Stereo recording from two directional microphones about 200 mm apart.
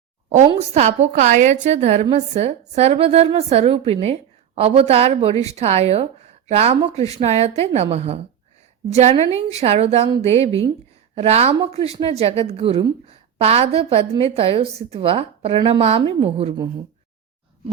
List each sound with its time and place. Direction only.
0.5 s a woman's voice: 35° right (ahead or behind)